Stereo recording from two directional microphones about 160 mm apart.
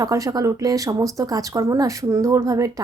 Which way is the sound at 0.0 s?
20° right (ahead or behind).